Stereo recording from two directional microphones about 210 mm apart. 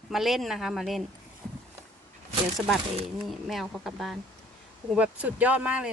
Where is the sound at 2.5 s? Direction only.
Centre (ahead or behind).